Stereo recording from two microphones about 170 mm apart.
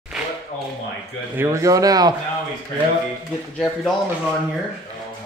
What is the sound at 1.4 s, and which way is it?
Speech, 20° right (ahead or behind).